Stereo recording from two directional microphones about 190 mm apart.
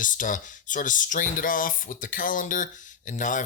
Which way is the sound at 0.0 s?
45° left (ahead or behind).